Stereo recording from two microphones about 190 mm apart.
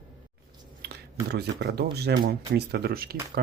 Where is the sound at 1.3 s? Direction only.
60° right (ahead or behind).